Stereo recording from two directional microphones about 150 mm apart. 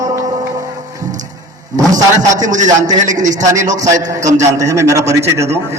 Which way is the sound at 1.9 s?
55° right (ahead or behind).